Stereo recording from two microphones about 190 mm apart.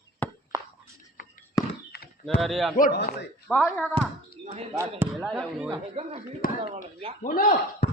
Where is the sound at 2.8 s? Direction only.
55° left (ahead or behind).